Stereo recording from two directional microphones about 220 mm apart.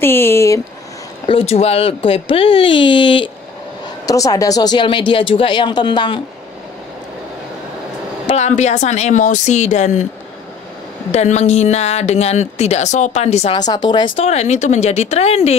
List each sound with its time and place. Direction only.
0.0 s speech: 10° left (ahead or behind)
1.2 s speech: 25° left (ahead or behind)
8.3 s speech: 30° left (ahead or behind)
11.1 s speech: 30° left (ahead or behind)
13.6 s speech: 20° left (ahead or behind)